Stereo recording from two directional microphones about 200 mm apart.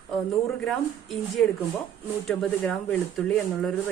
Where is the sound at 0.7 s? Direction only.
Centre (ahead or behind).